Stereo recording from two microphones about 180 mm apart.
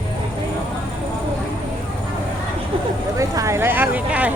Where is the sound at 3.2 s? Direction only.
15° right (ahead or behind).